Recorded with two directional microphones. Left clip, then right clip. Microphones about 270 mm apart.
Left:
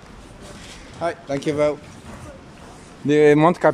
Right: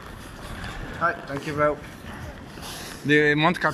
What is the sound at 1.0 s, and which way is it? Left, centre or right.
Speech, centre.